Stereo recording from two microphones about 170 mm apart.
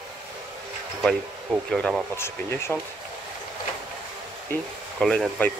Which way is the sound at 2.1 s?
15° left (ahead or behind).